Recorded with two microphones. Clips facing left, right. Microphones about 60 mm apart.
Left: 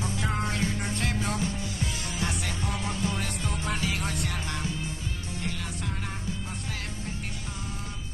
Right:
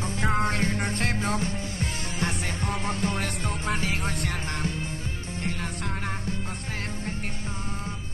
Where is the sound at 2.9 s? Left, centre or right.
Right.